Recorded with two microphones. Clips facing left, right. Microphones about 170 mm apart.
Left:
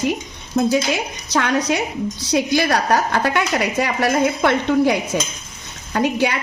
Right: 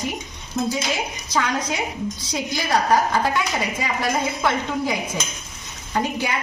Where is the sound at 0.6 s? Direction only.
60° left (ahead or behind).